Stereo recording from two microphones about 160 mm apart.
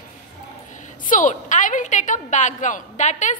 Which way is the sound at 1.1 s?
55° left (ahead or behind).